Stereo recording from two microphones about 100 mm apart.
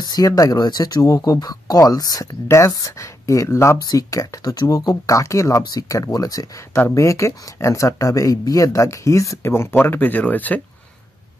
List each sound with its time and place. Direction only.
0.0 s speech: 40° left (ahead or behind)
3.7 s speech: 40° left (ahead or behind)
5.6 s speech: 40° left (ahead or behind); by 10.6 s 15° left (ahead or behind)